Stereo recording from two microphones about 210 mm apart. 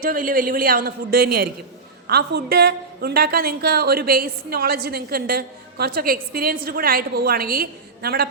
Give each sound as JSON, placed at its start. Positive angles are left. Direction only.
{"t": 0.0, "sound": "a woman's voice", "side_deg": -45}